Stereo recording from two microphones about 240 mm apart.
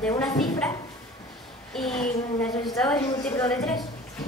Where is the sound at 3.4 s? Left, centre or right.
Centre.